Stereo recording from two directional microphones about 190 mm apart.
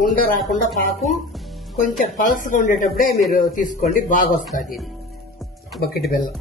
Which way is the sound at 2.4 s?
45° left (ahead or behind).